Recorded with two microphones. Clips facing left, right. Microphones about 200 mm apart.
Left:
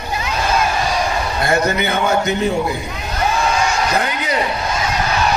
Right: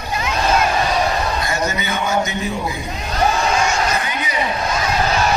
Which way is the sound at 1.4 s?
60° left (ahead or behind).